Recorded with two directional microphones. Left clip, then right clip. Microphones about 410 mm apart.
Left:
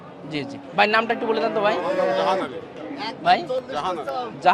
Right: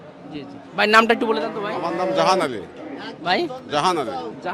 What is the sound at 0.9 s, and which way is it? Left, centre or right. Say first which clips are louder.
Speech: right 6 dB; right.